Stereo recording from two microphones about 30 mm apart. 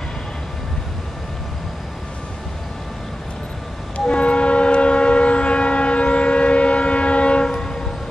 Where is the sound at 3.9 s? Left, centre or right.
Left.